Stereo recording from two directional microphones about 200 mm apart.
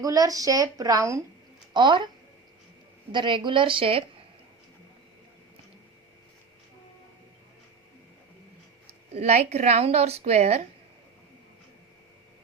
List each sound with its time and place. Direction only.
0.0 s a woman's voice: 15° right (ahead or behind)
3.1 s a woman's voice: 25° right (ahead or behind)
8.9 s a woman's voice: 35° right (ahead or behind)